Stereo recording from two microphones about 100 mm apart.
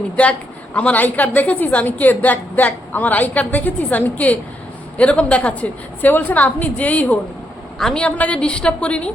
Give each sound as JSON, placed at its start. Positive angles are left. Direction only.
{"t": 0.2, "sound": "a woman's voice", "side_deg": 10}